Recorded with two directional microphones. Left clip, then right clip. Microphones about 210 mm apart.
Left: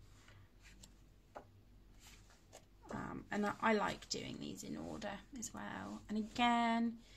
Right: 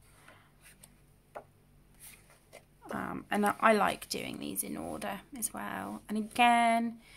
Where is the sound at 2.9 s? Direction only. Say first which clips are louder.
Right 9 dB; 40° right (ahead or behind).